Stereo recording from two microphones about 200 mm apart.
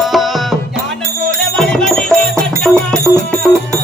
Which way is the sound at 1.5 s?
5° left (ahead or behind).